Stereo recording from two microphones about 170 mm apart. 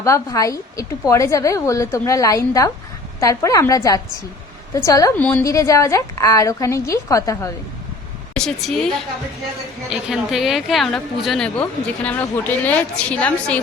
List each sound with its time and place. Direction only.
0.0 s a woman's voice: 20° left (ahead or behind)
8.3 s a woman's voice: 5° left (ahead or behind)